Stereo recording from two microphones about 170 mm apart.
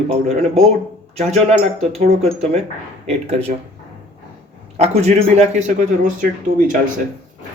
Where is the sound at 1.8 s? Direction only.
40° right (ahead or behind).